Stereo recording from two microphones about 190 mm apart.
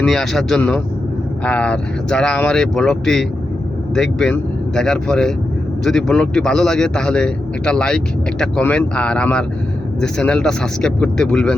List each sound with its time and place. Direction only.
0.0 s a man's voice: 5° left (ahead or behind)